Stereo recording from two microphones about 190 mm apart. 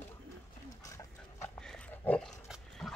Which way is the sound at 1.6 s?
5° left (ahead or behind).